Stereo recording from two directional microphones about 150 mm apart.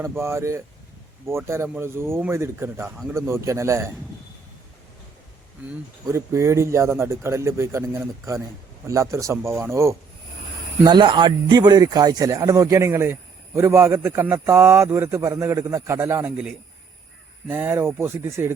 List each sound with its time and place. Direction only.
0.0 s speech: 15° right (ahead or behind)
6.1 s speech: 20° right (ahead or behind)
10.8 s speech: 30° right (ahead or behind)
17.5 s speech: 15° right (ahead or behind)